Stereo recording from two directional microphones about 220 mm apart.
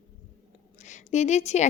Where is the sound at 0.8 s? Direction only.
35° left (ahead or behind).